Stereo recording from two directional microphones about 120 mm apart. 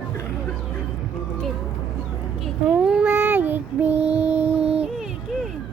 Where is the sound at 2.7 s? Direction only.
10° right (ahead or behind).